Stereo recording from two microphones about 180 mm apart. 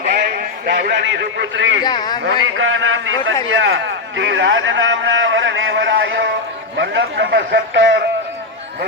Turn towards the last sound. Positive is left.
turn(degrees=-75)  # may be behind; listen again after turning